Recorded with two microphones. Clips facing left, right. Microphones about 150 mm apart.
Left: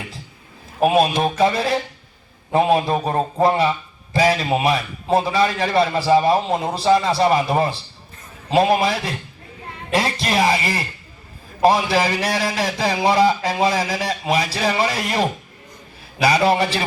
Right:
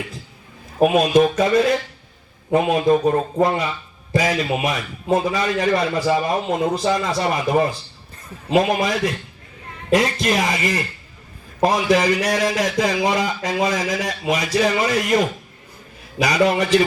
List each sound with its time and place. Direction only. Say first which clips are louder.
0.9 s a man's voice: right 2 dB; 30° left (ahead or behind)
4.1 s a man's voice: left 2 dB; 30° left (ahead or behind)